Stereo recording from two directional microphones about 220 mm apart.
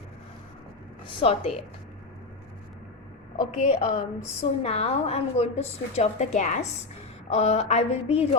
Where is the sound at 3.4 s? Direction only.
30° left (ahead or behind).